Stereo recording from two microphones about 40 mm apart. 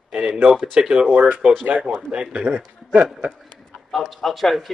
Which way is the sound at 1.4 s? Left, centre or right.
Right.